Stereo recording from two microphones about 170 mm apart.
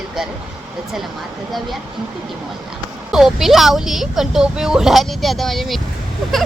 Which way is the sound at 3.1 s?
Centre (ahead or behind).